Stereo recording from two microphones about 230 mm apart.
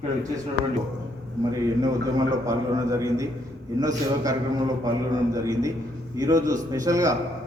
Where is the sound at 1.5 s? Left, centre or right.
Centre.